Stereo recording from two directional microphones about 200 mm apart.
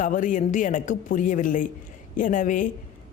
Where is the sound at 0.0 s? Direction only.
40° left (ahead or behind).